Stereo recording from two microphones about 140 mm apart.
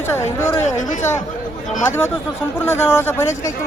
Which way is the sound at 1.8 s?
15° left (ahead or behind).